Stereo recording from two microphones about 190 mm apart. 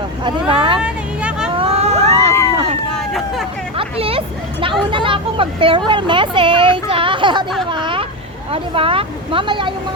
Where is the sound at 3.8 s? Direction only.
30° right (ahead or behind).